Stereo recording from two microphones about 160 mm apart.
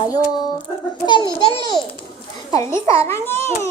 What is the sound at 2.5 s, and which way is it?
A child's voice, 20° left (ahead or behind).